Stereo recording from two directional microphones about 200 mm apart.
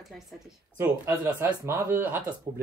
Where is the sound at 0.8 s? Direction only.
10° right (ahead or behind).